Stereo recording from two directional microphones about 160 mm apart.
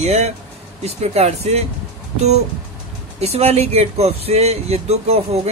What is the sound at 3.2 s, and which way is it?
Speech, 40° right (ahead or behind).